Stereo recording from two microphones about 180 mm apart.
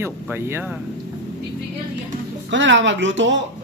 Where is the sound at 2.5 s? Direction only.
90° right.